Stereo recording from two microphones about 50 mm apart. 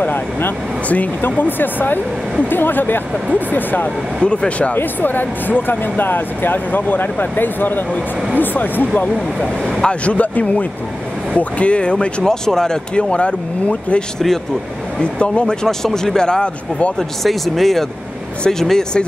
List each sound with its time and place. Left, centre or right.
0.0 s speech: left
4.2 s speech: centre
4.7 s speech: left
8.9 s speech: left
13.1 s a man's voice: left
17.2 s a man's voice: centre